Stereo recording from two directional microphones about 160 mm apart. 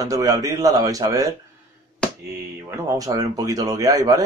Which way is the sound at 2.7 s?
20° right (ahead or behind).